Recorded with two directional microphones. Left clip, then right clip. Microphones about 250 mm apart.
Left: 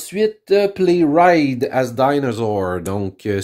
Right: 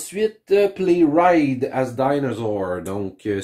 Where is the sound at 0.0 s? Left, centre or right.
Left.